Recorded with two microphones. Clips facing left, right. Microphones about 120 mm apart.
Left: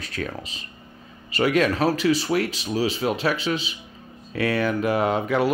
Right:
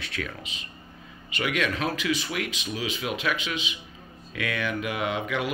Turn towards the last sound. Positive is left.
turn(degrees=40)  # may be behind; listen again after turning